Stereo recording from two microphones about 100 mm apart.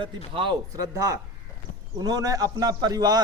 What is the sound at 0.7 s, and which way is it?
Speech, 35° right (ahead or behind).